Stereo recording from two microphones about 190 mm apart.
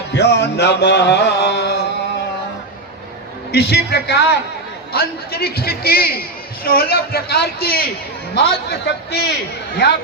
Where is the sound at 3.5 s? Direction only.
60° left (ahead or behind).